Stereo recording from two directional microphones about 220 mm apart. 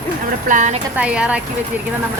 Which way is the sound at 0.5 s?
35° right (ahead or behind).